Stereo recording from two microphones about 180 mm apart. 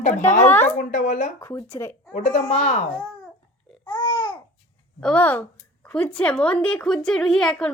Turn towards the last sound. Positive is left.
turn(degrees=5)  # may be behind; listen again after turning